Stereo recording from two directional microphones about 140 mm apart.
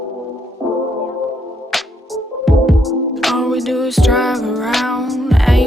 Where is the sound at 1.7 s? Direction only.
Centre (ahead or behind).